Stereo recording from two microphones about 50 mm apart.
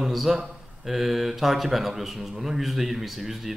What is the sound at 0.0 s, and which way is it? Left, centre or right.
Speech, centre.